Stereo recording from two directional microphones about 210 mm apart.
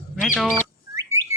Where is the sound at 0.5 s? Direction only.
15° right (ahead or behind).